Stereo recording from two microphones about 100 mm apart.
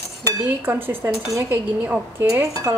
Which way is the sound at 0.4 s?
20° right (ahead or behind).